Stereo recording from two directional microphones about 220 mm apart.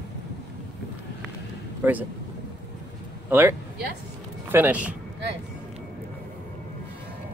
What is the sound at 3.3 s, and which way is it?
Speech, 10° right (ahead or behind).